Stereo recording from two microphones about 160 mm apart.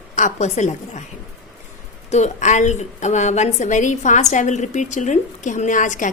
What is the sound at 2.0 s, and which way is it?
A woman's voice, 45° left (ahead or behind).